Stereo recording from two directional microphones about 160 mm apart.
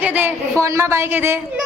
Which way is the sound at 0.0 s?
10° right (ahead or behind).